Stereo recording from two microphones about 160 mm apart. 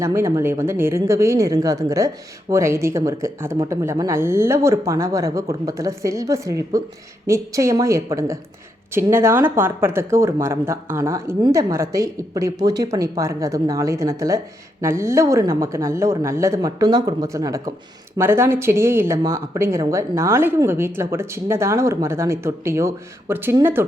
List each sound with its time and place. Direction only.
0.0 s speech: 20° right (ahead or behind)